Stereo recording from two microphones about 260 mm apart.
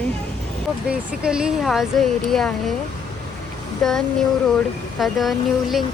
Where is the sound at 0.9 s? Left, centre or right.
Centre.